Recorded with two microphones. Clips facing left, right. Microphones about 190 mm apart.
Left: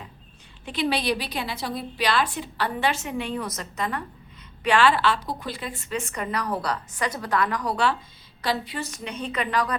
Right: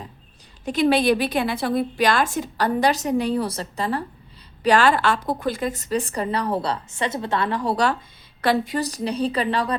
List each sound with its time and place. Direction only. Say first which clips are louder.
0.6 s a woman's voice: right 7 dB; 45° right (ahead or behind); by 7.8 s 30° right (ahead or behind)
8.4 s a woman's voice: right 7 dB; 50° right (ahead or behind); by 9.7 s 30° right (ahead or behind)